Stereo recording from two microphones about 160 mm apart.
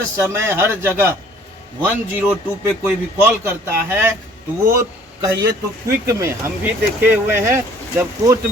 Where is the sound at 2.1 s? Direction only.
10° right (ahead or behind).